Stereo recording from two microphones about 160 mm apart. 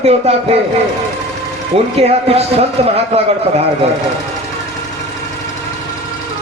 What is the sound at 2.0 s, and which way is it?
A man's voice, 40° right (ahead or behind).